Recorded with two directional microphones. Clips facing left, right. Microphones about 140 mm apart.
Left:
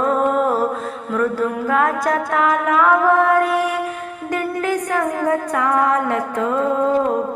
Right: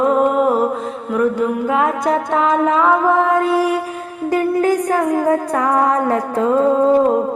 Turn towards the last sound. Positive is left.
turn(degrees=-30)  # may be behind; listen again after turning